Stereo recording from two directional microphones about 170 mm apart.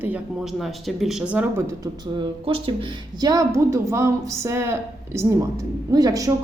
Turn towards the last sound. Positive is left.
turn(degrees=-20)  # may be behind; listen again after turning